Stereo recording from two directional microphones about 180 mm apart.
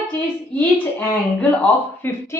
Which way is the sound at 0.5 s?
10° left (ahead or behind).